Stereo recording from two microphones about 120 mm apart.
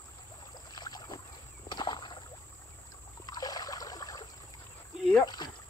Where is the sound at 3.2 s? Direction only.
35° left (ahead or behind).